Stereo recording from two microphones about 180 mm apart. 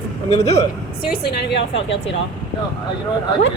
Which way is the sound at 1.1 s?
65° left (ahead or behind).